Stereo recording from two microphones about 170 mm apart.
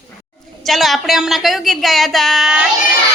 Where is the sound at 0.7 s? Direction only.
Centre (ahead or behind).